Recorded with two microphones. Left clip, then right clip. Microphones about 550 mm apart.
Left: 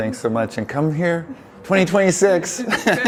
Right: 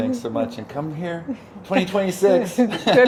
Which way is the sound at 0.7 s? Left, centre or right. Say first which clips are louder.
Left 8 dB; left.